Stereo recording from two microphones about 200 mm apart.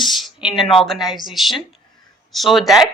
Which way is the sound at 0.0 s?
Centre (ahead or behind).